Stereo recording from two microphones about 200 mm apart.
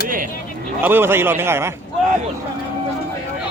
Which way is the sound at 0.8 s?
10° right (ahead or behind).